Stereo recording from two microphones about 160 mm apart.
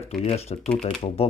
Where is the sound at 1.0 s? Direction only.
40° left (ahead or behind).